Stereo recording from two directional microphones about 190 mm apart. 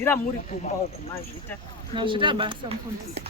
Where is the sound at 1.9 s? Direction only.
25° right (ahead or behind).